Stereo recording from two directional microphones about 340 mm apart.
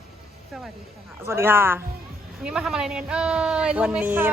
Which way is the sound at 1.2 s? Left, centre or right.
Centre.